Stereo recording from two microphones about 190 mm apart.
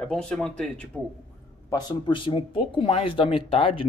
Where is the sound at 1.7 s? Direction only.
20° left (ahead or behind).